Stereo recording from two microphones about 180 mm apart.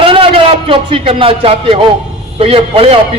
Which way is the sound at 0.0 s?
30° right (ahead or behind).